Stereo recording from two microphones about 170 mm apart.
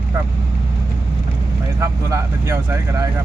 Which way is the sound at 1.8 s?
15° right (ahead or behind).